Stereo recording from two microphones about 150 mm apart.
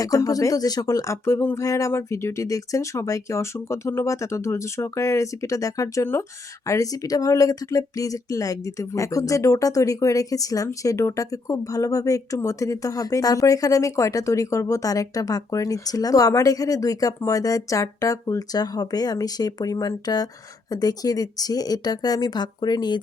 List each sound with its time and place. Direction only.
0.0 s speech: 25° left (ahead or behind)